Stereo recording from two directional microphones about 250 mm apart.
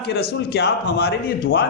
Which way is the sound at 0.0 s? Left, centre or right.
Left.